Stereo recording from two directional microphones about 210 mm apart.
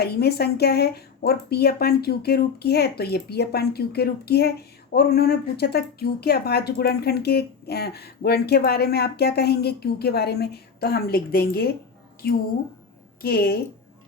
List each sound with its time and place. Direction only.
0.0 s speech: 50° left (ahead or behind)